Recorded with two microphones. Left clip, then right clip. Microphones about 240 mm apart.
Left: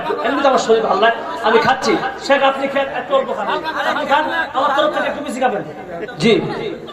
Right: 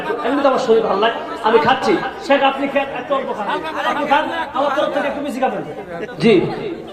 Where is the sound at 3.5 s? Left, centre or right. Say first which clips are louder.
Left 2 dB; right.